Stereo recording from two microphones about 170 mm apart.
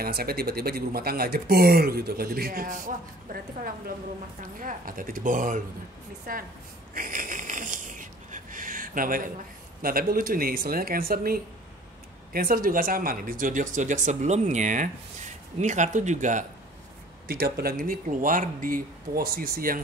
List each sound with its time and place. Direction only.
0.0 s speech: 65° right (ahead or behind)
6.9 s snoring: 50° right (ahead or behind)
9.8 s speech: 60° right (ahead or behind)
17.3 s speech: 65° right (ahead or behind)